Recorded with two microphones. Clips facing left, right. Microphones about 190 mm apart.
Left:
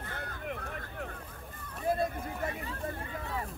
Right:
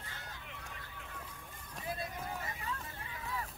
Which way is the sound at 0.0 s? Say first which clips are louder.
Left 10 dB; 55° left (ahead or behind).